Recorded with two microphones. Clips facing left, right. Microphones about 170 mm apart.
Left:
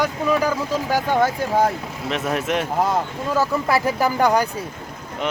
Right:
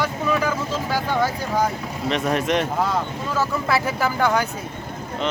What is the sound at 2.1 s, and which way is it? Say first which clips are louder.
Speech: right 1 dB; 5° left (ahead or behind).